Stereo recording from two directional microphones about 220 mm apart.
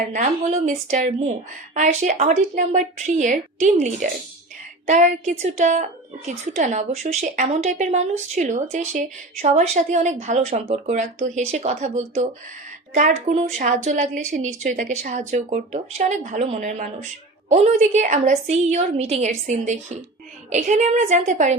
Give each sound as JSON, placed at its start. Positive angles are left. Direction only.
{"t": 0.1, "sound": "a woman's voice", "side_deg": -35}